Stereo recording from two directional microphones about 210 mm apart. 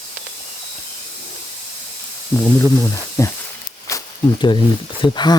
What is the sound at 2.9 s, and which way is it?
Speech, 15° left (ahead or behind).